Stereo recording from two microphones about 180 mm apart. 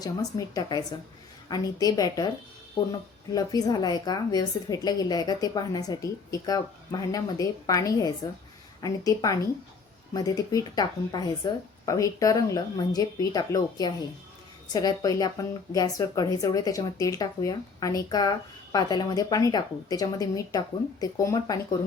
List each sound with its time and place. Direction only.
0.0 s speech: 20° left (ahead or behind)
3.3 s speech: 20° left (ahead or behind)